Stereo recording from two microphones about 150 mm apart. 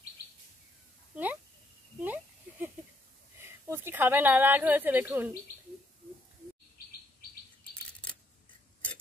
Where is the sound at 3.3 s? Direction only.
15° right (ahead or behind).